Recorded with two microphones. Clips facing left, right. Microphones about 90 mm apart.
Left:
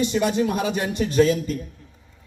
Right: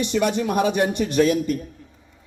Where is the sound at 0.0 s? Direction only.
65° right (ahead or behind).